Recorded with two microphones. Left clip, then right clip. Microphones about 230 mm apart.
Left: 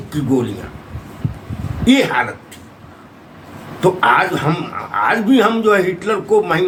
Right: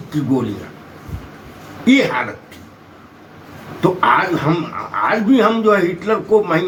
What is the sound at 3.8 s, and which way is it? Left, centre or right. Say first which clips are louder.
A man's voice: left 1 dB; centre.